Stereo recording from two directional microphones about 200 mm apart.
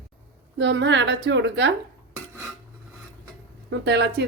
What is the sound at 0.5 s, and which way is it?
Speech, 60° right (ahead or behind).